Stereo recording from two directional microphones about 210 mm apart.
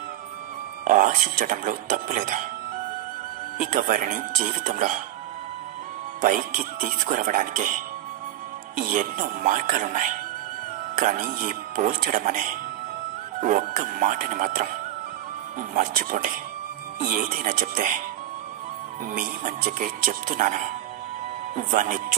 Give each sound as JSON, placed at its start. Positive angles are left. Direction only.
{"t": 0.8, "sound": "speech", "side_deg": -40}
{"t": 3.5, "sound": "speech", "side_deg": -40}
{"t": 6.2, "sound": "speech", "side_deg": -40}
{"t": 15.7, "sound": "speech", "side_deg": -40}
{"t": 19.1, "sound": "speech", "side_deg": -40}